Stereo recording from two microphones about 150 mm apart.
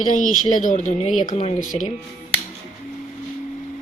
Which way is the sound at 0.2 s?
60° left (ahead or behind).